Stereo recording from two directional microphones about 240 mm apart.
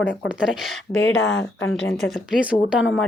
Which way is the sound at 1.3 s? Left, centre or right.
Left.